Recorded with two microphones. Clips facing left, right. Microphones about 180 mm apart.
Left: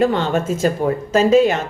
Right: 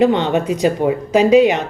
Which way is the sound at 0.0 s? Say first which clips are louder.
Right 3 dB; 20° right (ahead or behind).